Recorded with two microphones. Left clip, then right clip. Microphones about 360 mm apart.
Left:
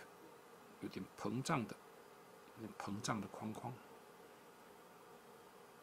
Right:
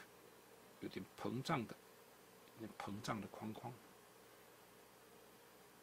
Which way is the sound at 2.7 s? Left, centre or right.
Right.